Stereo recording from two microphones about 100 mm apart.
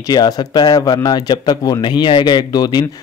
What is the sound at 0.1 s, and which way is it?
A man's voice, 45° left (ahead or behind).